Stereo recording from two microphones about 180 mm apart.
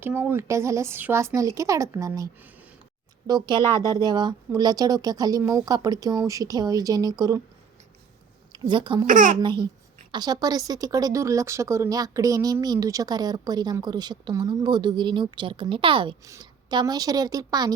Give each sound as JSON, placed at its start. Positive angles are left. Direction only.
{"t": 0.0, "sound": "speech", "side_deg": -10}
{"t": 3.6, "sound": "speech", "side_deg": 15}
{"t": 3.9, "sound": "speech", "side_deg": -25}
{"t": 8.5, "sound": "speech", "side_deg": -25}
{"t": 9.0, "sound": "a child's voice", "side_deg": -50}
{"t": 9.4, "sound": "speech", "side_deg": -25}